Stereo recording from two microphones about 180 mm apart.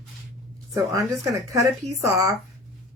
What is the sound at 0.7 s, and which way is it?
Speech, 20° right (ahead or behind).